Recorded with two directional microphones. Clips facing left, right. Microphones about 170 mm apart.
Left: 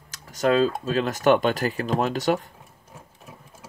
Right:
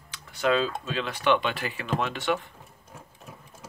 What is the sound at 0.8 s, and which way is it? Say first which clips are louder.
Speech: left 6 dB; 40° left (ahead or behind).